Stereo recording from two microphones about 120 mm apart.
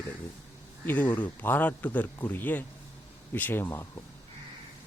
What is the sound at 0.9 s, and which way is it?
A man's voice, 15° left (ahead or behind).